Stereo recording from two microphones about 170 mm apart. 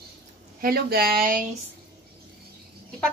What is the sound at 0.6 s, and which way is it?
Speech, 65° right (ahead or behind).